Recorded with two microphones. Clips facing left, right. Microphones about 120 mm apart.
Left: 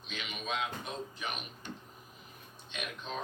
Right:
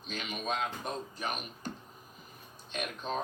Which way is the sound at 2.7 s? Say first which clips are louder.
Right 5 dB; 40° right (ahead or behind).